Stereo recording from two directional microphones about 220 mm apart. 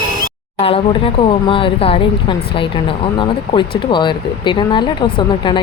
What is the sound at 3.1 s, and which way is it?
Speech, 20° left (ahead or behind).